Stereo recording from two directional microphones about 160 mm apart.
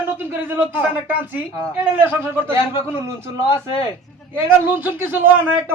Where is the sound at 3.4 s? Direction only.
35° left (ahead or behind).